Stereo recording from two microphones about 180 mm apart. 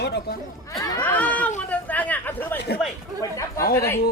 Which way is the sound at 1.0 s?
10° left (ahead or behind).